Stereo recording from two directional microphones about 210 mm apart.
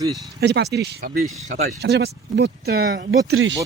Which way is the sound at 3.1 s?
70° right (ahead or behind).